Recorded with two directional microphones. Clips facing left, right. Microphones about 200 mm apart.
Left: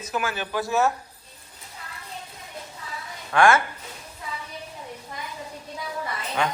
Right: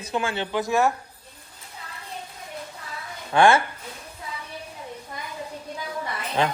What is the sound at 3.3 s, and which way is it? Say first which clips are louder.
Speech: right 1 dB; 30° right (ahead or behind).